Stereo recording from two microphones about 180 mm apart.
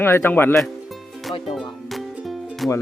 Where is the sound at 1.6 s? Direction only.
Centre (ahead or behind).